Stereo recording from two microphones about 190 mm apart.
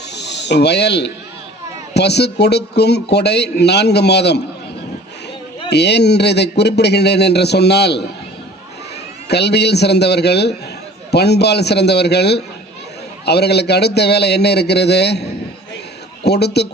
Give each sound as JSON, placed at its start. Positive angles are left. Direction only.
{"t": 0.1, "sound": "snake", "side_deg": 65}
{"t": 1.9, "sound": "a man's voice", "side_deg": 60}
{"t": 5.7, "sound": "a man's voice", "side_deg": 60}
{"t": 9.3, "sound": "a man's voice", "side_deg": 60}